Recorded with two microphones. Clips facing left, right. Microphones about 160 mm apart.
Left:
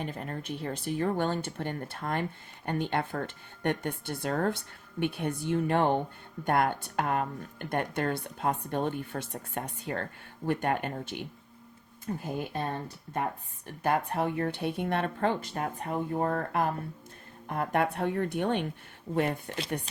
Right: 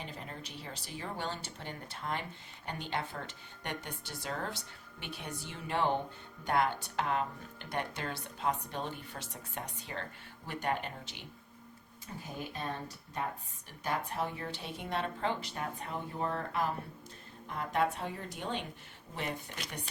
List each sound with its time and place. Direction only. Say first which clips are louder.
0.0 s speech: left 8 dB; 55° left (ahead or behind)
13.8 s speech: left 7 dB; 60° left (ahead or behind)